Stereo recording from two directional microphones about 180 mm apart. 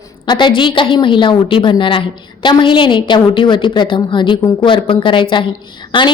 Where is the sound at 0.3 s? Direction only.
25° left (ahead or behind).